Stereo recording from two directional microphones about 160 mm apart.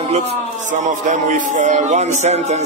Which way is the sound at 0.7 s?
50° right (ahead or behind).